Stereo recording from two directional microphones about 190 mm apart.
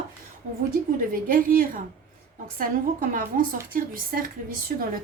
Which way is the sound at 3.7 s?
45° right (ahead or behind).